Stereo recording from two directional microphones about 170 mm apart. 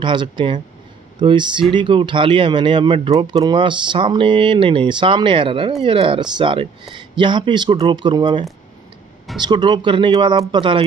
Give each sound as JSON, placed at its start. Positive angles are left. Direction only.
{"t": 0.0, "sound": "speech", "side_deg": -30}